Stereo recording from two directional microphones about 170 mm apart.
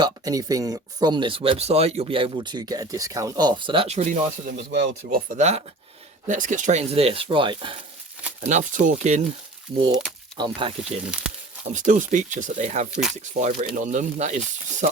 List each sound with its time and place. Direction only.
0.0 s speech: 20° right (ahead or behind); by 4.6 s 50° right (ahead or behind)
4.7 s speech: 90° right
5.3 s speech: 40° right (ahead or behind)
8.4 s speech: 45° right (ahead or behind)
10.3 s speech: 30° right (ahead or behind)
11.0 s speech: 5° right (ahead or behind)
11.7 s speech: 45° right (ahead or behind)
12.9 s speech: 5° right (ahead or behind)
13.1 s speech: 45° right (ahead or behind)